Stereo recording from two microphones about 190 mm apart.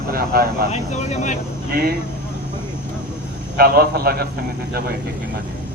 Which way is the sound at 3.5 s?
55° right (ahead or behind).